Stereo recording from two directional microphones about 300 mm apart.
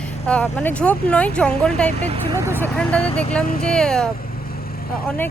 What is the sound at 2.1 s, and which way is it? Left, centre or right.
Speech, centre.